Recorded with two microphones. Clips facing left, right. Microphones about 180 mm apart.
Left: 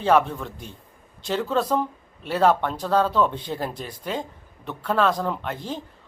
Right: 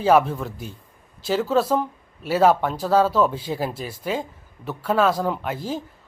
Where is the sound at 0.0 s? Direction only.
5° right (ahead or behind).